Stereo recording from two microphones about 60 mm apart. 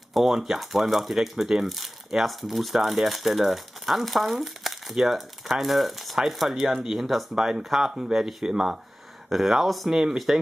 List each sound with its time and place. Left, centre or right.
0.1 s speech: centre